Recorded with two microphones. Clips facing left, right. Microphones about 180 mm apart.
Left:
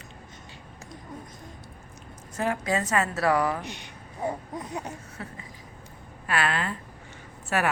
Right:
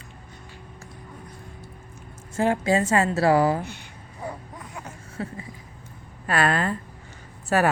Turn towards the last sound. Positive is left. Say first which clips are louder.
# right 5 dB
turn(degrees=-40)  # may be behind; listen again after turning